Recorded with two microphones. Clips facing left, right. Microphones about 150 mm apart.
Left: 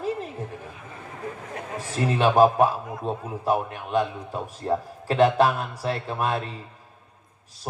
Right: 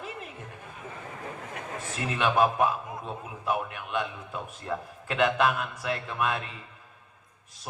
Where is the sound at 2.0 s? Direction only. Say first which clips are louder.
Left 7 dB; 35° left (ahead or behind).